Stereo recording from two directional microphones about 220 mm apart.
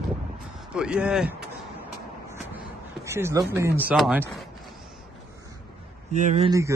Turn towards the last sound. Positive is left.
turn(degrees=-15)  # may be behind; listen again after turning